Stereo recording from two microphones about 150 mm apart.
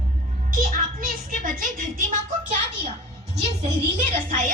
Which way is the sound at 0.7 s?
70° right (ahead or behind).